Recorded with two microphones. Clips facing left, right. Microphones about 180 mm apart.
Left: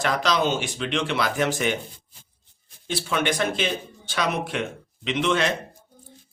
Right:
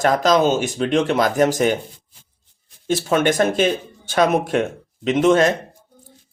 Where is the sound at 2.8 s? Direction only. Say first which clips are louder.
Right 7 dB; 45° right (ahead or behind).